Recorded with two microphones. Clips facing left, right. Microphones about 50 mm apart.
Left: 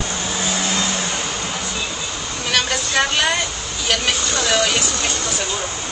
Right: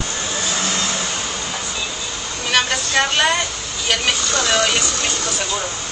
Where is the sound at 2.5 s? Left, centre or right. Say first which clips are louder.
Right 2 dB; centre.